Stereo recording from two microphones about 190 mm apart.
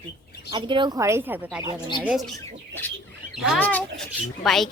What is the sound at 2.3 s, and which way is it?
Speech, 10° left (ahead or behind).